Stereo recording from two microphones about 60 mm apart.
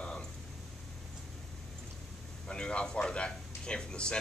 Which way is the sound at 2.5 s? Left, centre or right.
Centre.